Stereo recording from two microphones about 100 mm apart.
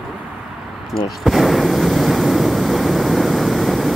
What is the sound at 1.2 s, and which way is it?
Waves, centre (ahead or behind).